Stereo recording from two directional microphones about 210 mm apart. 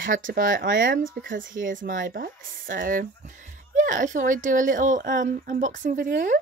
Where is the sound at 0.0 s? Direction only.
40° right (ahead or behind).